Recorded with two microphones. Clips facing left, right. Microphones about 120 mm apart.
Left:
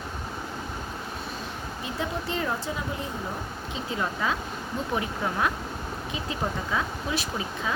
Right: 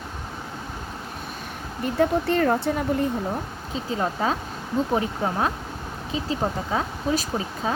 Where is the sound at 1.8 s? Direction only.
55° right (ahead or behind).